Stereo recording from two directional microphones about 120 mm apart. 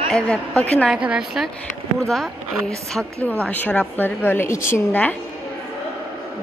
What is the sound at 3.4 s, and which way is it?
A woman's voice, 10° left (ahead or behind).